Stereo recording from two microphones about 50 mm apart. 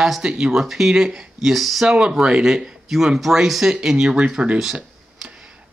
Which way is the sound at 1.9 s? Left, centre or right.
Centre.